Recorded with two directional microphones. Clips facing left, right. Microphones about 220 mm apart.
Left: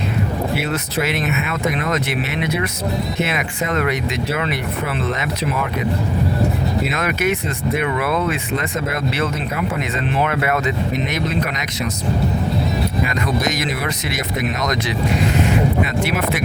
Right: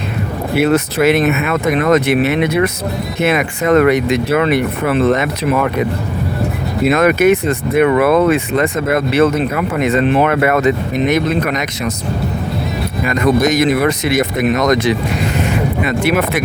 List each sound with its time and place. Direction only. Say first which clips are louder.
0.5 s speech: right 9 dB; 55° right (ahead or behind)
6.8 s speech: right 13 dB; 55° right (ahead or behind)
13.1 s speech: right 8 dB; 55° right (ahead or behind)